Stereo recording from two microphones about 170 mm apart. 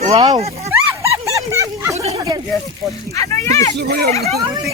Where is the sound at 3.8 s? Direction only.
70° right (ahead or behind).